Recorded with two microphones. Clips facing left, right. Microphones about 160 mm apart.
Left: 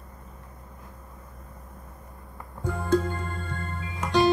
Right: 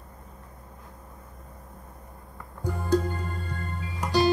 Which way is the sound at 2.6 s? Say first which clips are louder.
Left 1 dB; 35° right (ahead or behind).